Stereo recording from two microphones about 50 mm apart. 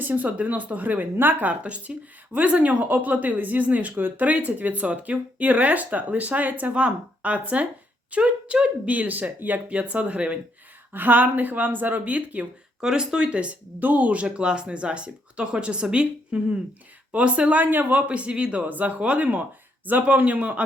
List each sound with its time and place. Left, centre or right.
0.0 s speech: right
1.5 s speech: right
10.9 s speech: right
12.8 s speech: centre
13.7 s speech: right